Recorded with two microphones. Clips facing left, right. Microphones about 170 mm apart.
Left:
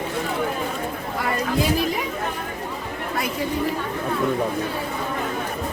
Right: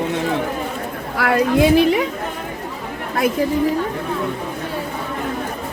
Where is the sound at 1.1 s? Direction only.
75° right (ahead or behind).